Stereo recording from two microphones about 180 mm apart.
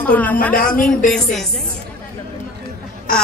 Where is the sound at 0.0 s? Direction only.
10° left (ahead or behind).